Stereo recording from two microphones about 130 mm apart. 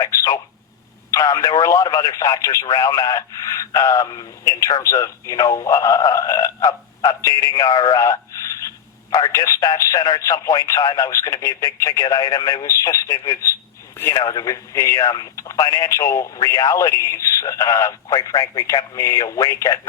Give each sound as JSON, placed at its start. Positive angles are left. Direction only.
{"t": 0.0, "sound": "telephone", "side_deg": 25}
{"t": 1.1, "sound": "speech", "side_deg": 25}